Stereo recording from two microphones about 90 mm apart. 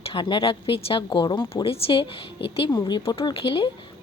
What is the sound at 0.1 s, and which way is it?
A woman's voice, 65° left (ahead or behind).